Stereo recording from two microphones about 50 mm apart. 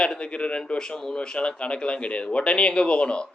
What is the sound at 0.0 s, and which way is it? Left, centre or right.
Speech, left.